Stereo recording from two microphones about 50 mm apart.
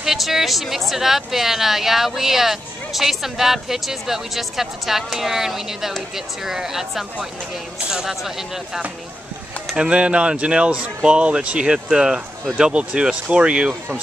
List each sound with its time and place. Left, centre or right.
0.0 s a woman's voice: centre
9.8 s speech: right